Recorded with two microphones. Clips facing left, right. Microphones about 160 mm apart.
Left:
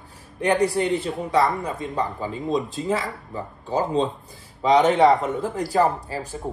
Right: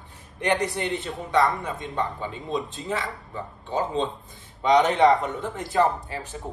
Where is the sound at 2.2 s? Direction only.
40° left (ahead or behind).